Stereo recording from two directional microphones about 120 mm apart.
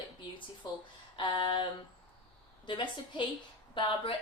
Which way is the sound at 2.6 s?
40° left (ahead or behind).